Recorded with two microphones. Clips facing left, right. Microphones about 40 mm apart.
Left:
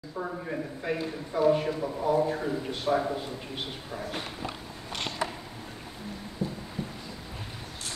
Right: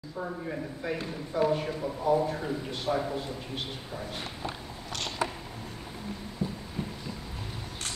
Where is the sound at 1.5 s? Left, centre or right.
Centre.